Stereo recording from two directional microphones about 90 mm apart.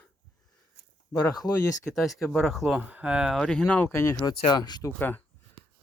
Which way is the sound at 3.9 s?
30° left (ahead or behind).